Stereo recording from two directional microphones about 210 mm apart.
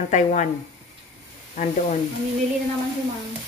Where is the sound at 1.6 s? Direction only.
35° left (ahead or behind).